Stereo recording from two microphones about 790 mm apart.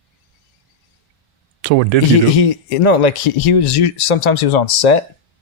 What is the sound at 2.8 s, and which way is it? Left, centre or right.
Speech, left.